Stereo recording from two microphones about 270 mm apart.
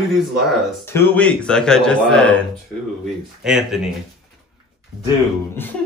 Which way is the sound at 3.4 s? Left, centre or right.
Centre.